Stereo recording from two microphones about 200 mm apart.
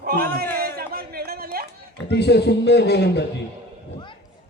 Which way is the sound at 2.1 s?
55° left (ahead or behind).